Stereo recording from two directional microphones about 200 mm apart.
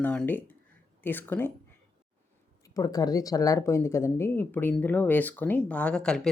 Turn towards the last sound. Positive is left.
turn(degrees=5)  # may be behind; listen again after turning